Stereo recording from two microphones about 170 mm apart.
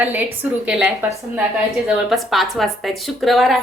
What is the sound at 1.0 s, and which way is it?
Speech, 20° right (ahead or behind).